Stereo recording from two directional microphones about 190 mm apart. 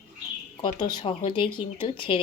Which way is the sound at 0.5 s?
20° left (ahead or behind).